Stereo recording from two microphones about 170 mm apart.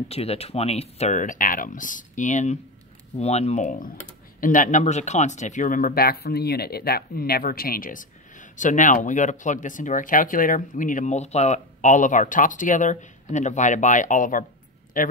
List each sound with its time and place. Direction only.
0.1 s speech: 35° left (ahead or behind); by 15.1 s 55° left (ahead or behind)